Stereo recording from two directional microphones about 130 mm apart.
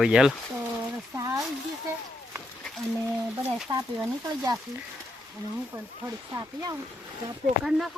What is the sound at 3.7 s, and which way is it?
Speech, 30° right (ahead or behind).